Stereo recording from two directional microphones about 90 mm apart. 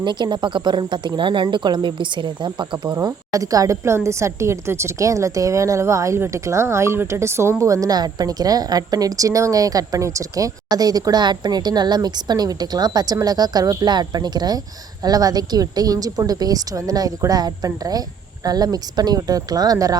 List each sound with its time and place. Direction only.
0.0 s a woman's voice: 60° right (ahead or behind)
3.3 s a woman's voice: 40° right (ahead or behind)